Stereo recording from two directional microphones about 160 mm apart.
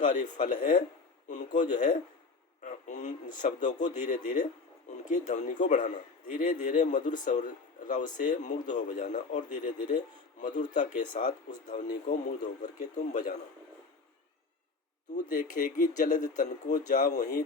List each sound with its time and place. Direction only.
0.0 s a man's voice: 55° left (ahead or behind)
15.1 s a man's voice: 55° left (ahead or behind)